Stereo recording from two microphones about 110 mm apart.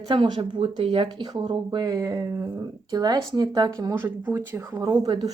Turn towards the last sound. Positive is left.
turn(degrees=-35)  # may be behind; listen again after turning